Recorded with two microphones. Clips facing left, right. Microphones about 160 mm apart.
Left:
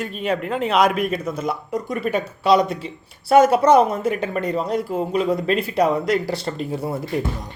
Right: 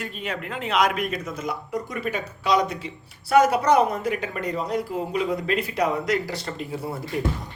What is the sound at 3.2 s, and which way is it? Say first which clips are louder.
Speech: left 4 dB; 25° left (ahead or behind).